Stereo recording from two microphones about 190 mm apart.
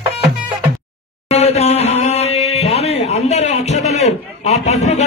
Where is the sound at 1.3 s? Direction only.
35° left (ahead or behind).